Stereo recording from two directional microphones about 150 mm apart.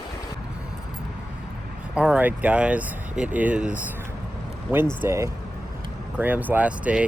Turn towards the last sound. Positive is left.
turn(degrees=-10)  # may be behind; listen again after turning